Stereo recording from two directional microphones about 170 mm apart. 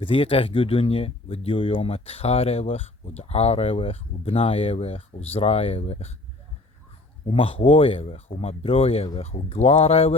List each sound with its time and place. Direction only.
0.0 s speech: 30° left (ahead or behind)
7.3 s speech: 35° left (ahead or behind)